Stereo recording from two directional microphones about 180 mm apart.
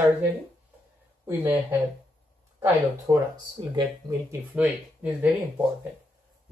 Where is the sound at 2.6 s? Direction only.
15° right (ahead or behind).